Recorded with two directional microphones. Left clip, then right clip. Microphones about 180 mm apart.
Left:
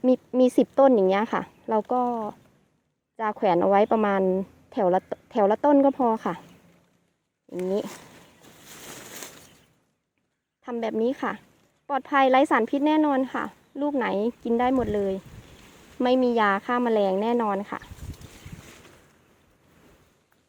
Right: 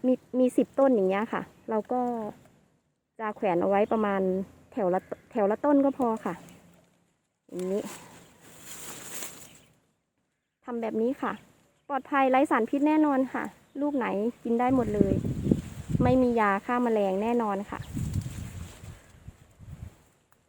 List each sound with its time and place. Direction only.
0.0 s a sound: 15° left (ahead or behind)
0.5 s speech: 20° left (ahead or behind)
7.6 s speech: 20° left (ahead or behind)
10.7 s speech: 5° left (ahead or behind)